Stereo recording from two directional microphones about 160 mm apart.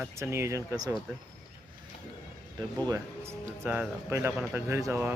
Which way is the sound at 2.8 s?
20° right (ahead or behind).